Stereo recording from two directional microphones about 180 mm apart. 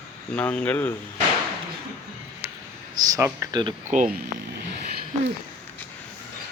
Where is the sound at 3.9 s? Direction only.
45° right (ahead or behind).